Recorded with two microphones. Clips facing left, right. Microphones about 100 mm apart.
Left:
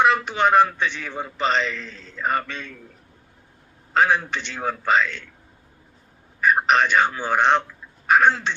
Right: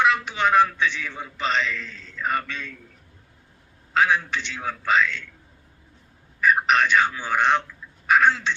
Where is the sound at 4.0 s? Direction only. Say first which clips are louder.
Left 2 dB; 50° left (ahead or behind).